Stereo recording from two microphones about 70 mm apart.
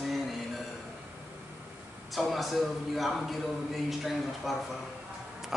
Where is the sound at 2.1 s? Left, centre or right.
Centre.